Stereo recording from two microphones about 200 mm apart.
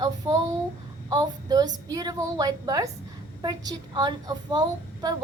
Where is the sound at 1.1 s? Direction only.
20° right (ahead or behind).